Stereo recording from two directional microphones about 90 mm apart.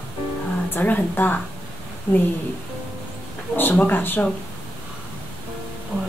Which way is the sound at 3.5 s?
20° left (ahead or behind).